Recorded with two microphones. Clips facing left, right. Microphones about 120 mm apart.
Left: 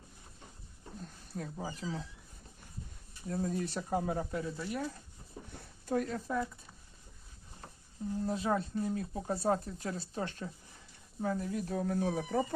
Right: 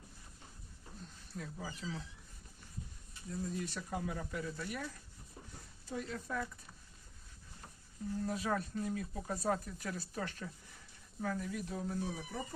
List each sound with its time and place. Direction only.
1.4 s speech: 35° left (ahead or behind)
1.8 s speech: 45° left (ahead or behind)
3.2 s speech: 60° left (ahead or behind)
3.6 s speech: 40° left (ahead or behind)
5.8 s speech: 55° left (ahead or behind)
6.1 s speech: 25° left (ahead or behind)
8.2 s speech: 30° left (ahead or behind); by 12.5 s 80° left